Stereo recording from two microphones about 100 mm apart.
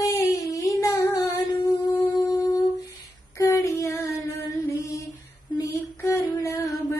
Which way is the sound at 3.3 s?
30° left (ahead or behind).